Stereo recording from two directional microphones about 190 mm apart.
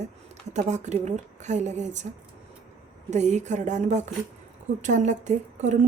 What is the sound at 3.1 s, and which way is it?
A woman's voice, 40° right (ahead or behind).